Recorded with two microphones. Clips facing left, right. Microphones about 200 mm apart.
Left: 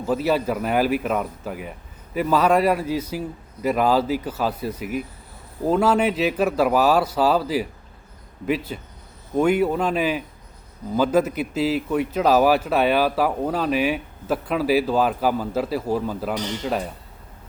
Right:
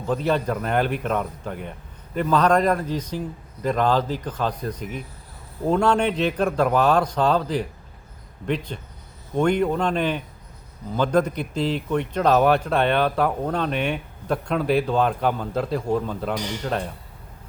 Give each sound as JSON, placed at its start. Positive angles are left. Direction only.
{"t": 0.0, "sound": "a man's voice", "side_deg": 5}